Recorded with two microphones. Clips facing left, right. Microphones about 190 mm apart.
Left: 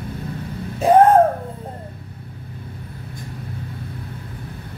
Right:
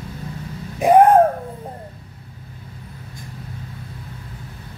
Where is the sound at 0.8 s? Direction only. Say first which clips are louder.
Even; 15° right (ahead or behind).